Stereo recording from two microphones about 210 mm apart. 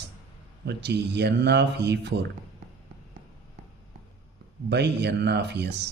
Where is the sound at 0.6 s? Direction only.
55° right (ahead or behind).